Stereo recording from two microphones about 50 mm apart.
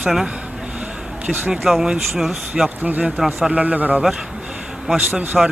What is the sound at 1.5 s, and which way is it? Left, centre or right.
Speech, centre.